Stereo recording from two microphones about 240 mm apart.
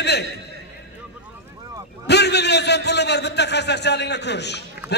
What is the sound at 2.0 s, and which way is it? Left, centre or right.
A man's voice, left.